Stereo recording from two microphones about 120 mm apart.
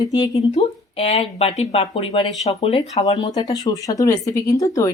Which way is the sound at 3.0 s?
30° left (ahead or behind).